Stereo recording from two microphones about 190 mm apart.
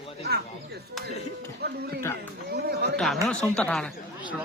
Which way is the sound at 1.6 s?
55° right (ahead or behind).